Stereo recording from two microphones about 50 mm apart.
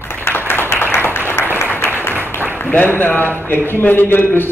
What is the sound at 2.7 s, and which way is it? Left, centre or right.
A man's voice, left.